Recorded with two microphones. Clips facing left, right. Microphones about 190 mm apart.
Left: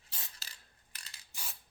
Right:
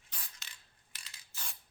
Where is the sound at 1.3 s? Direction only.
15° left (ahead or behind).